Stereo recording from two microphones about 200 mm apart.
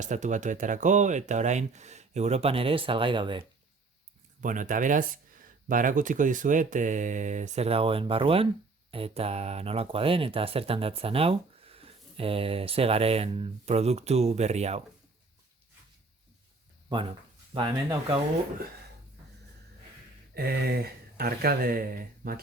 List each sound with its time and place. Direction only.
0.0 s speech: 35° right (ahead or behind)
4.4 s speech: 40° right (ahead or behind)
16.9 s speech: 25° right (ahead or behind)
20.3 s speech: 50° right (ahead or behind)